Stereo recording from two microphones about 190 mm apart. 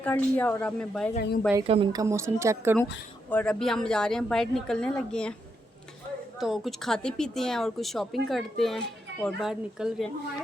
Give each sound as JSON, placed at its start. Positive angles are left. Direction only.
{"t": 0.0, "sound": "a woman's voice", "side_deg": 10}
{"t": 1.6, "sound": "speech", "side_deg": -30}
{"t": 3.2, "sound": "a woman's voice", "side_deg": 10}
{"t": 6.4, "sound": "speech", "side_deg": 0}